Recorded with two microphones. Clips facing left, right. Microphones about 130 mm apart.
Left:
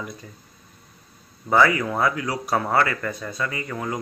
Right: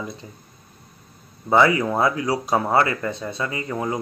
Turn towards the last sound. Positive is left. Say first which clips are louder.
# right 3 dB
turn(degrees=-25)  # may be behind; listen again after turning